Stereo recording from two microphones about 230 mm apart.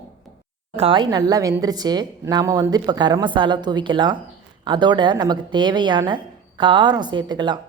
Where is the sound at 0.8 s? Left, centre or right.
Right.